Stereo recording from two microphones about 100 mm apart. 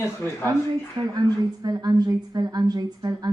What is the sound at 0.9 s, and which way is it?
A woman's voice, 40° right (ahead or behind).